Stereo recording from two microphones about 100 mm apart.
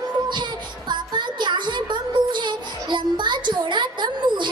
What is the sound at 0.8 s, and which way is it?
Music, 50° right (ahead or behind).